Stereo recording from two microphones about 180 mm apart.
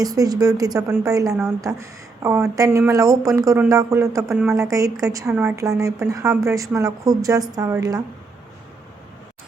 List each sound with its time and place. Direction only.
0.0 s a woman's voice: 20° right (ahead or behind)